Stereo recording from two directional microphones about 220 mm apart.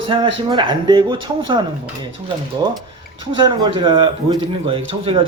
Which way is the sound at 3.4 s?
20° right (ahead or behind).